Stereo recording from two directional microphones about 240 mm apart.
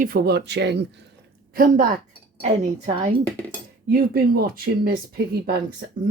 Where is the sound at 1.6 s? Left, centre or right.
Right.